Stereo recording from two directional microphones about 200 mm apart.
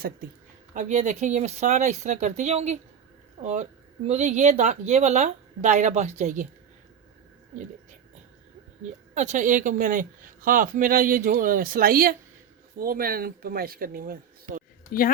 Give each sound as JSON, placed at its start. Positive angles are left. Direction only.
{"t": 0.7, "sound": "a woman's voice", "side_deg": -35}
{"t": 9.1, "sound": "speech", "side_deg": -35}